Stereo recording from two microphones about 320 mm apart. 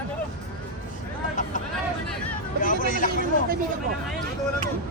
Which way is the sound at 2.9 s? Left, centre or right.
Left.